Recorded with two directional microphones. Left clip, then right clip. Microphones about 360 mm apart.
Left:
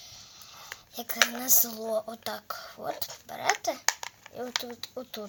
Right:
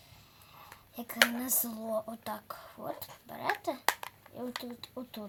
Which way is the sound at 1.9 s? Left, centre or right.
Left.